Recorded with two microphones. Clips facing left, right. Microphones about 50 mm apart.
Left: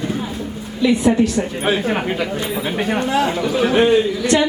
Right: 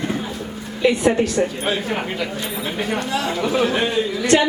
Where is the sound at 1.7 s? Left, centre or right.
Centre.